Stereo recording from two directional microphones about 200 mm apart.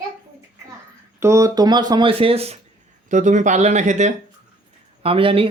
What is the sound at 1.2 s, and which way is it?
Speech, 15° right (ahead or behind).